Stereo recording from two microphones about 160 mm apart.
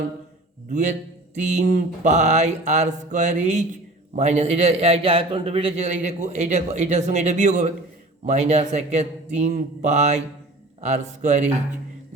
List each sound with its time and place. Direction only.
0.7 s a man's voice: 50° right (ahead or behind)